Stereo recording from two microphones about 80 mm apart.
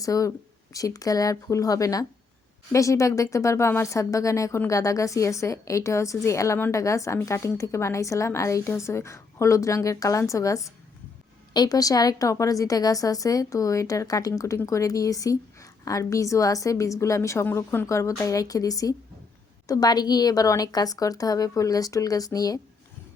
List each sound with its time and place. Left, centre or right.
0.0 s a woman's voice: left